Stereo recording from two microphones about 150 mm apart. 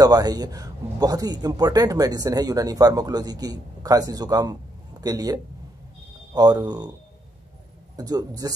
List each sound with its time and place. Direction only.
0.0 s speech: 25° right (ahead or behind)
7.9 s speech: 25° right (ahead or behind)